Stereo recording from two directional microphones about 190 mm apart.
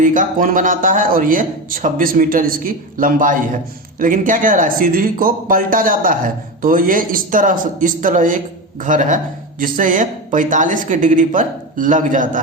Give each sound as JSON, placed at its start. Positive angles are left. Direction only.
{"t": 0.0, "sound": "speech", "side_deg": -45}